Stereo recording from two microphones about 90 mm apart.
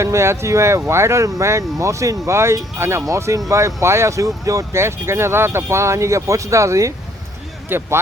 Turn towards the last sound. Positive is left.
turn(degrees=-25)  # may be behind; listen again after turning